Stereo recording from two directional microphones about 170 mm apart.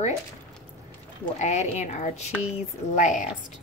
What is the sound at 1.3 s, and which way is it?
Speech, 40° left (ahead or behind).